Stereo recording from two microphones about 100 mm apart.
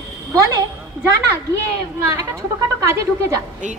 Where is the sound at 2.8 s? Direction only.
30° right (ahead or behind).